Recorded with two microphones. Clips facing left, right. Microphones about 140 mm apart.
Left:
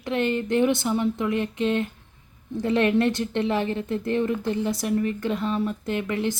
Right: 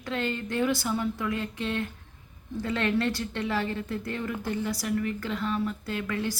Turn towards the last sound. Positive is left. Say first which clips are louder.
# left 5 dB
turn(degrees=20)  # may be behind; listen again after turning